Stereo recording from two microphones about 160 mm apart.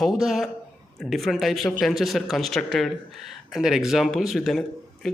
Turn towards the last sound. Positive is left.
turn(degrees=0)  # may be behind; listen again after turning